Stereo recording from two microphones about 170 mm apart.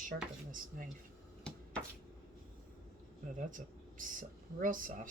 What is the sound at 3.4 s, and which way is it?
Speech, 50° right (ahead or behind).